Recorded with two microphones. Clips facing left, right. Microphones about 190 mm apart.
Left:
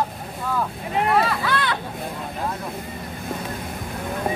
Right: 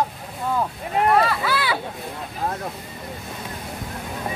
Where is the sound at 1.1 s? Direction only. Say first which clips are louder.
Right 1 dB; centre (ahead or behind).